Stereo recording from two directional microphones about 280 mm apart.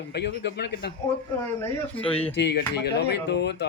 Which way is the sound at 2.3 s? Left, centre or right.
Left.